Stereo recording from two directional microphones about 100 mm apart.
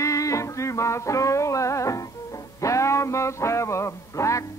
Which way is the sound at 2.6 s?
30° left (ahead or behind).